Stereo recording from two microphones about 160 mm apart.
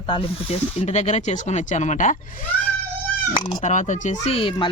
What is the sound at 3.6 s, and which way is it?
Speech, 50° left (ahead or behind).